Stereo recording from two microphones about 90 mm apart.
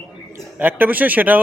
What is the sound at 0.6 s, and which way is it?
Speech, 20° right (ahead or behind).